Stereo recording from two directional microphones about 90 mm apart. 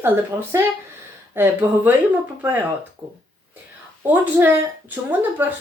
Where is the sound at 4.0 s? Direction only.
25° right (ahead or behind).